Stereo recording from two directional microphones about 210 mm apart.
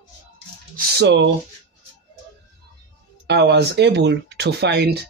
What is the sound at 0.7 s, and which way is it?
Speech, 55° right (ahead or behind).